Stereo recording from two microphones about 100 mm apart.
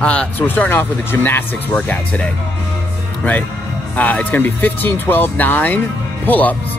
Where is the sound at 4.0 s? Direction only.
15° left (ahead or behind).